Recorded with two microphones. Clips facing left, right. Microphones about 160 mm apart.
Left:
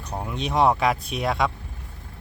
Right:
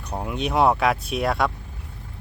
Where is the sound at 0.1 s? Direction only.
5° right (ahead or behind).